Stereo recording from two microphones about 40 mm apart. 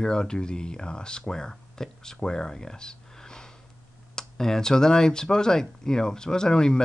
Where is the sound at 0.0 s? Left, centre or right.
Centre.